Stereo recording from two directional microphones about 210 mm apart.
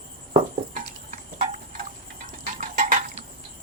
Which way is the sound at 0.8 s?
35° right (ahead or behind).